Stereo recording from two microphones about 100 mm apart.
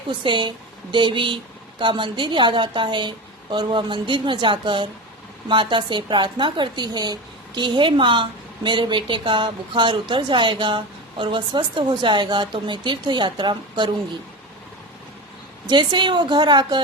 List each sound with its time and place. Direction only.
0.1 s a woman's voice: 55° right (ahead or behind)
15.6 s a woman's voice: 50° right (ahead or behind)